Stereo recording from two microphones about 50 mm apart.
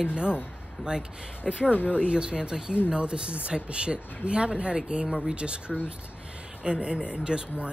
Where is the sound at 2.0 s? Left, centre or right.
Centre.